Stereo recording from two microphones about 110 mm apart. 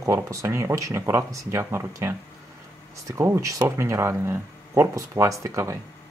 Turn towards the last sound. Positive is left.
turn(degrees=-25)  # may be behind; listen again after turning